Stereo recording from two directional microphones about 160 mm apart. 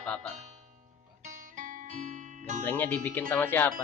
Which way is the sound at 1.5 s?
50° right (ahead or behind).